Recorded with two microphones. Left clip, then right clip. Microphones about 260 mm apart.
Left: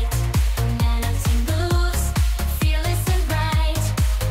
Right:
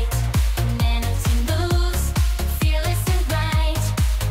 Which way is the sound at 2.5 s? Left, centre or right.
Centre.